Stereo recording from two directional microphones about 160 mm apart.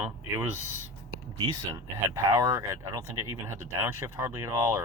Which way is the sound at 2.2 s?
20° right (ahead or behind).